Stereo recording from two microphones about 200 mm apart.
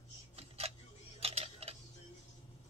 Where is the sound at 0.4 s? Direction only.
30° right (ahead or behind).